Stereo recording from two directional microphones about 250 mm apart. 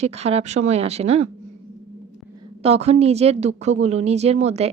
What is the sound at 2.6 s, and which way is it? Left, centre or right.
A woman's voice, right.